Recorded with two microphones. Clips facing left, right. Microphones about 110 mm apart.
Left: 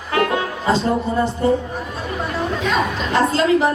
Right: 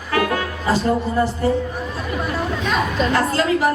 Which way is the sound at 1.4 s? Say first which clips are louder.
Left 4 dB; 25° left (ahead or behind).